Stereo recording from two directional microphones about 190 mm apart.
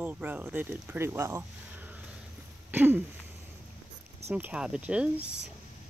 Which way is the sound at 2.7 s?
10° right (ahead or behind).